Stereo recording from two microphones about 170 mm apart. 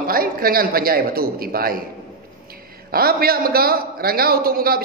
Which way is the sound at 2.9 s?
60° right (ahead or behind).